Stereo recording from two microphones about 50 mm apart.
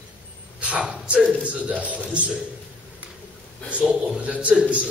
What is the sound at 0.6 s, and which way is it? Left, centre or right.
A man's voice, right.